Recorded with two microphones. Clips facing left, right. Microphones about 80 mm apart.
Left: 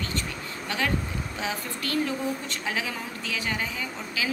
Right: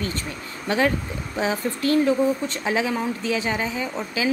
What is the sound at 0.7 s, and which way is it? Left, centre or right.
Speech, right.